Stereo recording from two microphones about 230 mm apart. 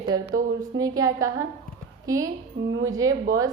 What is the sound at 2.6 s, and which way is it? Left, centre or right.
Speech, right.